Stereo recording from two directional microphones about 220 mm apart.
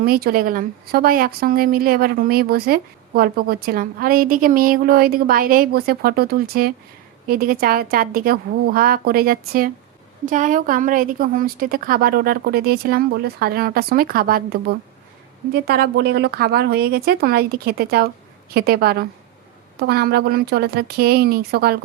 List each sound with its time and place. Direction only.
0.0 s a woman's voice: 45° right (ahead or behind)